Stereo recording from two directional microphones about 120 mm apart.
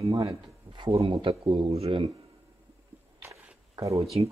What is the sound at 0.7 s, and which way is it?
Speech, 40° right (ahead or behind).